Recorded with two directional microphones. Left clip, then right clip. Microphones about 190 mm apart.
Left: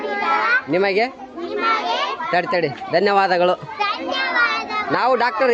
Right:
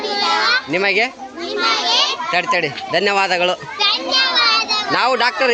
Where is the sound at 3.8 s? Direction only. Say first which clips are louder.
Right 9 dB; 20° right (ahead or behind).